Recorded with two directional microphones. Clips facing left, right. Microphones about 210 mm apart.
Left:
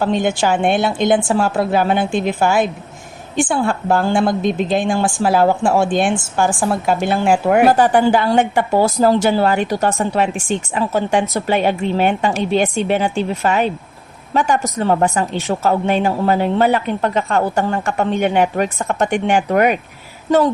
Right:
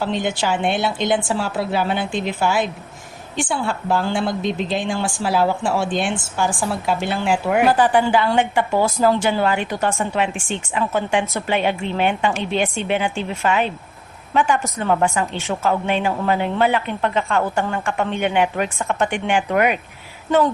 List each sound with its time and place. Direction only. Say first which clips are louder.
0.0 s a woman's voice: left 5 dB; 50° left (ahead or behind)